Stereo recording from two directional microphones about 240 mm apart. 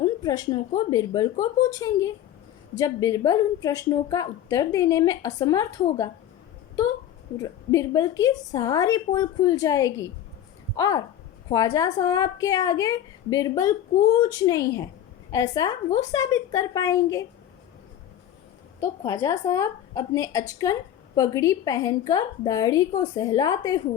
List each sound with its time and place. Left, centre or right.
0.0 s a sound: centre
0.8 s a woman's voice: centre
7.3 s a woman's voice: centre
18.8 s a woman's voice: centre